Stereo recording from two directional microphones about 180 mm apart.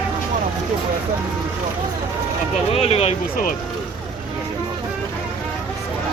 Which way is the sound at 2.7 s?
35° left (ahead or behind).